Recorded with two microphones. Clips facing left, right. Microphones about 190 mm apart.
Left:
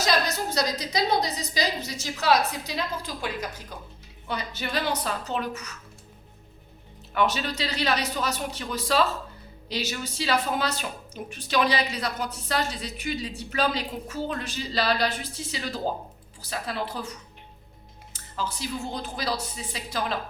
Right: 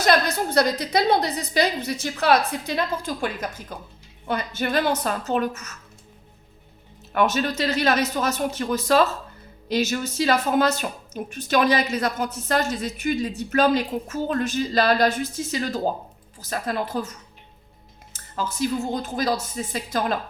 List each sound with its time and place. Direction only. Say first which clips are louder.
0.0 s a woman's voice: right 5 dB; 55° right (ahead or behind)
7.1 s speech: right 4 dB; 50° right (ahead or behind)
18.1 s speech: right 3 dB; 45° right (ahead or behind)